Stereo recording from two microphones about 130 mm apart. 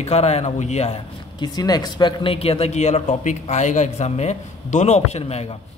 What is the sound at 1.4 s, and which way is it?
Speech, 30° left (ahead or behind).